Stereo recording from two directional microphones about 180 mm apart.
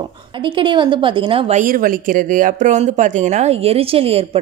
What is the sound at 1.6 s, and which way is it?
Speech, 50° right (ahead or behind).